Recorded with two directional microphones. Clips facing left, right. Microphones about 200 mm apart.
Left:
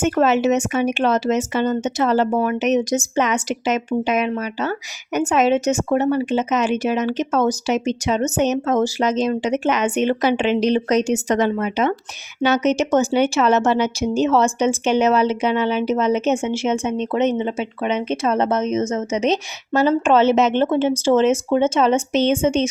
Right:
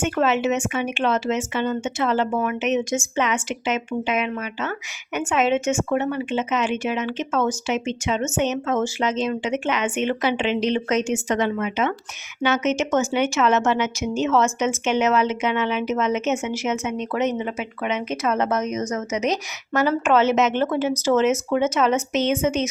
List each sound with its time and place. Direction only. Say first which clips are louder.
0.0 s speech: left 4 dB; 40° left (ahead or behind)